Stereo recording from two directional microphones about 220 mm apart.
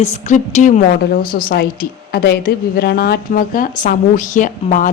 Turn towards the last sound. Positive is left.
turn(degrees=35)  # may be behind; listen again after turning